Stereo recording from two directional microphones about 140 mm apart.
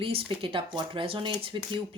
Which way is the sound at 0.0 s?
40° right (ahead or behind).